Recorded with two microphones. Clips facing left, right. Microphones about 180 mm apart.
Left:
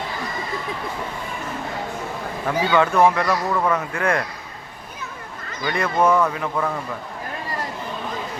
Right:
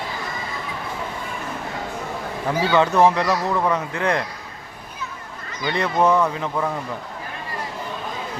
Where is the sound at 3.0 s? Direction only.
30° right (ahead or behind).